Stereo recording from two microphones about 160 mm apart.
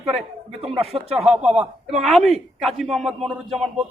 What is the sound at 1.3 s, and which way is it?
A man's voice, 5° right (ahead or behind).